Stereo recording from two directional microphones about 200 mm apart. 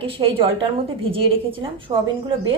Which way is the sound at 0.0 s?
25° right (ahead or behind).